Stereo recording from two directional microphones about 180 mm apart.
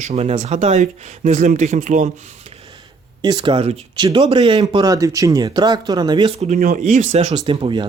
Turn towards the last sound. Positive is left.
turn(degrees=-25)  # may be behind; listen again after turning